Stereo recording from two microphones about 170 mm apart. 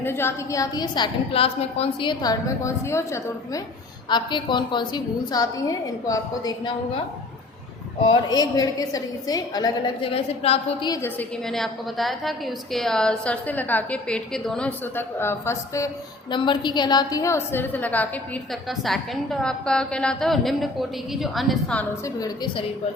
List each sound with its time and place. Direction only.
0.0 s a woman's voice: 15° left (ahead or behind)
4.1 s a woman's voice: 25° left (ahead or behind)
8.1 s a woman's voice: 20° left (ahead or behind)
11.0 s a woman's voice: 5° left (ahead or behind)
16.3 s a woman's voice: 25° left (ahead or behind); by 21.8 s 5° left (ahead or behind)
22.0 s a woman's voice: 25° left (ahead or behind)